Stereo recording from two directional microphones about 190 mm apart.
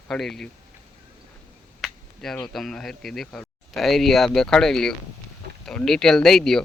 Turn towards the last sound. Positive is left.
turn(degrees=0)  # may be behind; listen again after turning